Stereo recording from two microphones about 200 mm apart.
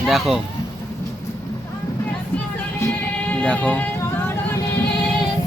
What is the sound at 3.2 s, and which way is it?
Speech, 5° left (ahead or behind).